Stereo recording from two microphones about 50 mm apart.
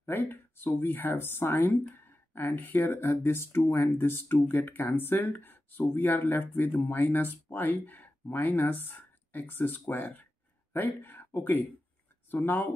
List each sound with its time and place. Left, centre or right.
0.0 s speech: left